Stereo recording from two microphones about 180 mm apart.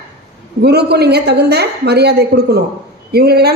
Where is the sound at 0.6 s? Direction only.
65° right (ahead or behind).